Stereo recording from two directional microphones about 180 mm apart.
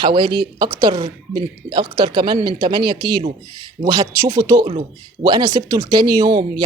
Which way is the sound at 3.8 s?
20° right (ahead or behind).